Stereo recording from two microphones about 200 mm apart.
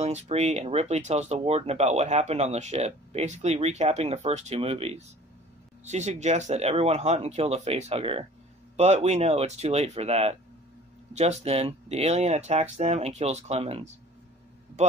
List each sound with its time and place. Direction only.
0.0 s a man's voice: 35° right (ahead or behind)